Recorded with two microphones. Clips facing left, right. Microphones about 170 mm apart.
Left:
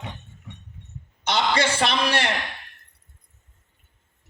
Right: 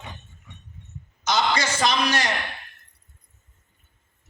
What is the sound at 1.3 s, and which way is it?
A man's voice, 30° left (ahead or behind).